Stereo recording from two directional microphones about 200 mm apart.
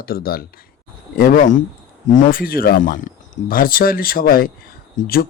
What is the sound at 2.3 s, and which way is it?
Speech, 45° left (ahead or behind).